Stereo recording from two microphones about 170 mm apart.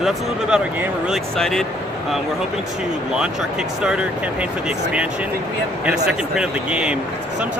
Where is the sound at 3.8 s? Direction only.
5° right (ahead or behind).